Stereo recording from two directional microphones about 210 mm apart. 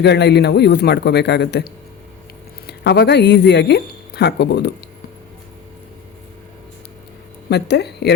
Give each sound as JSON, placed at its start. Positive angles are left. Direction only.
{"t": 0.0, "sound": "a man's voice", "side_deg": 55}
{"t": 7.5, "sound": "a man's voice", "side_deg": 50}